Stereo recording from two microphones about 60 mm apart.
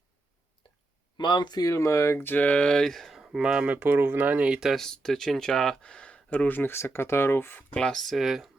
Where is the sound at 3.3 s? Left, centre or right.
Centre.